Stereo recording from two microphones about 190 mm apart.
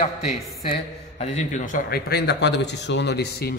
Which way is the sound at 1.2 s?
40° left (ahead or behind).